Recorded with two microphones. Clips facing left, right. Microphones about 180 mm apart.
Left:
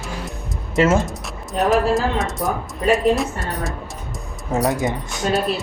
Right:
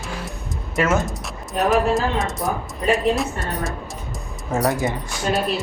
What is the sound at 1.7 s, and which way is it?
Speech, centre (ahead or behind).